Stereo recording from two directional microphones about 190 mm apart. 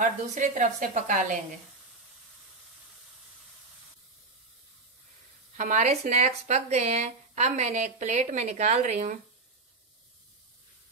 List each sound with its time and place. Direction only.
0.0 s speech: 40° right (ahead or behind)
5.6 s speech: 40° right (ahead or behind)